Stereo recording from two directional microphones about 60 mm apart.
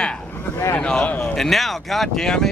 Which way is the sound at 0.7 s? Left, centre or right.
Centre.